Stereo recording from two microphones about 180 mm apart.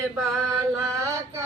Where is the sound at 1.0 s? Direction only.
15° right (ahead or behind).